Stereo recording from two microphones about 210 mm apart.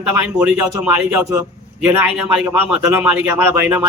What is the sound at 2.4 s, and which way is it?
Speech, 10° right (ahead or behind).